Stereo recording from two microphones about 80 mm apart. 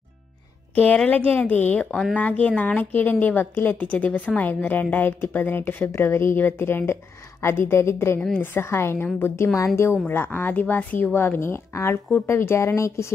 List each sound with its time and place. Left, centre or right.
0.7 s a woman's voice: centre; by 13.1 s left